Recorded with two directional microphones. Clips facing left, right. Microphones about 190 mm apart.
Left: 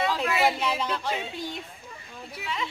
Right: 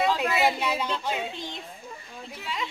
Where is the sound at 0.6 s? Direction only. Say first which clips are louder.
Even; 10° right (ahead or behind).